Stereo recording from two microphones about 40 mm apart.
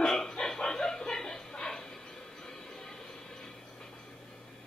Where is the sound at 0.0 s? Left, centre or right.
Centre.